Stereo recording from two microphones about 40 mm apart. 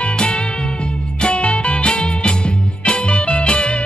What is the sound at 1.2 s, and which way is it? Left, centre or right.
Music, left.